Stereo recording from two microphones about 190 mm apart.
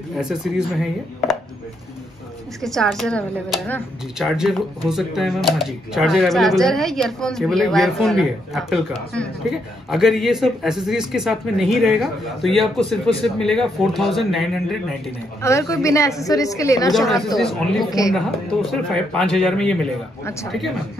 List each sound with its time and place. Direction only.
0.2 s a man's voice: 5° right (ahead or behind)
2.6 s a man's voice: centre (ahead or behind)
9.8 s a man's voice: centre (ahead or behind)
15.4 s a woman's voice: 15° left (ahead or behind)
16.9 s a man's voice: centre (ahead or behind)